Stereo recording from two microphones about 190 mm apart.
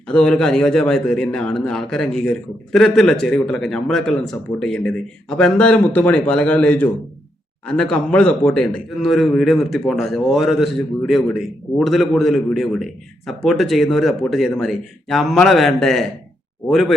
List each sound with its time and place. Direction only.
0.1 s speech: 5° left (ahead or behind)